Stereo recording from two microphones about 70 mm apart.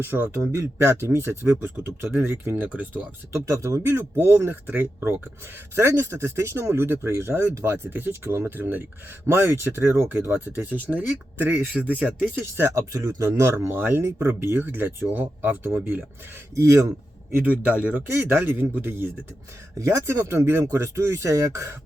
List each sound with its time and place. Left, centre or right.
0.0 s speech: right
3.3 s speech: right
4.2 s speech: right
10.3 s speech: right
12.7 s speech: right
13.7 s speech: right
14.5 s speech: right
16.6 s speech: right
17.3 s speech: right
19.8 s speech: right